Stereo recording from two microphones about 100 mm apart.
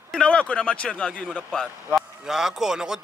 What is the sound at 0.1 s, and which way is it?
A man's voice, 10° left (ahead or behind).